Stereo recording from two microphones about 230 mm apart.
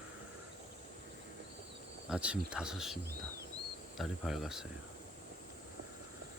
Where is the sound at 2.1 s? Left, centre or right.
Centre.